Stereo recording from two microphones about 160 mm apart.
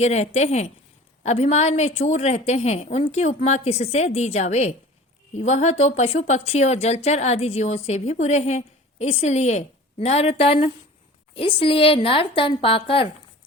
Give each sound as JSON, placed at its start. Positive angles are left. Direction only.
{"t": 0.0, "sound": "a woman's voice", "side_deg": 45}